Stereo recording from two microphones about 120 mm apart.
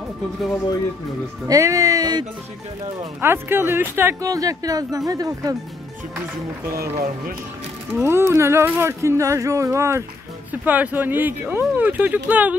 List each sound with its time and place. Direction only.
1.5 s speech: 30° right (ahead or behind)
3.2 s speech: 20° right (ahead or behind)
7.9 s speech: 20° right (ahead or behind)
10.5 s speech: 15° right (ahead or behind)